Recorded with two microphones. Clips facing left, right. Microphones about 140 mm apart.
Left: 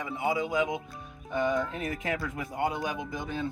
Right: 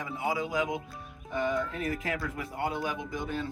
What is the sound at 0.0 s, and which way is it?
Speech, 25° left (ahead or behind).